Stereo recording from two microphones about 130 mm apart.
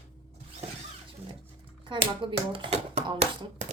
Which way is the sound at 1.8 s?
40° right (ahead or behind).